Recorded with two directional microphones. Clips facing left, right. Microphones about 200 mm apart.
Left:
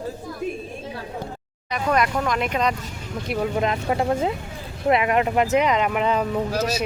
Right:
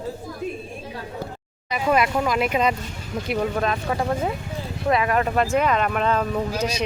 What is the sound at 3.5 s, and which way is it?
Speech, 20° left (ahead or behind).